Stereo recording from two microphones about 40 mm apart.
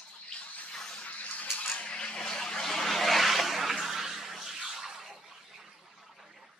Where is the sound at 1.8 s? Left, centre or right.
Left; by 5.1 s centre.